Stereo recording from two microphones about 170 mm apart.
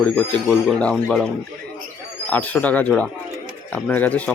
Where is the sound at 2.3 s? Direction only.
10° left (ahead or behind).